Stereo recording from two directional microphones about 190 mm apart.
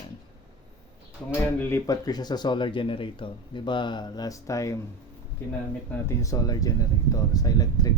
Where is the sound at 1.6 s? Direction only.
15° left (ahead or behind).